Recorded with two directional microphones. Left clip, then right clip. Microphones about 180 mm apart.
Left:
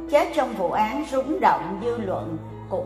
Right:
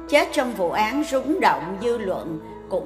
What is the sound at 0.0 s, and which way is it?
A woman's voice, 15° right (ahead or behind).